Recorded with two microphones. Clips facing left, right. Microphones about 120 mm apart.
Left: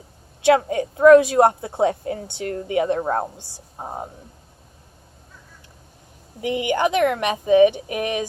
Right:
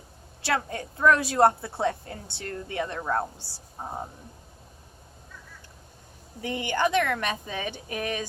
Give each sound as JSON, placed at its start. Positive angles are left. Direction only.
{"t": 0.4, "sound": "a woman's voice", "side_deg": 15}
{"t": 6.4, "sound": "a woman's voice", "side_deg": 15}